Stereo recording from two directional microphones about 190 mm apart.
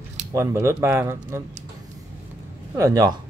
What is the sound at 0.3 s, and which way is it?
Speech, 15° right (ahead or behind).